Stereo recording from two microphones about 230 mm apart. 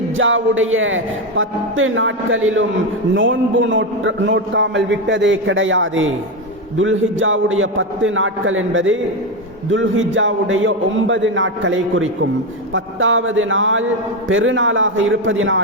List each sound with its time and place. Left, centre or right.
0.2 s a man's voice: right